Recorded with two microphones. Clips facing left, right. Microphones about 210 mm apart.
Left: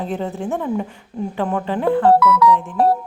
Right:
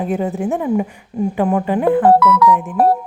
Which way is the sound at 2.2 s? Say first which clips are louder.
Right 1 dB; 50° right (ahead or behind).